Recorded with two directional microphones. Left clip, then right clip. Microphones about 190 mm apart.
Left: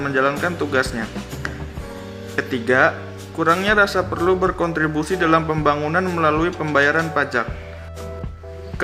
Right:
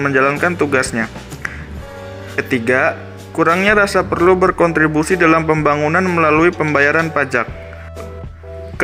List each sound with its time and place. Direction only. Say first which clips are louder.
0.0 s a man's voice: right 5 dB; 35° right (ahead or behind)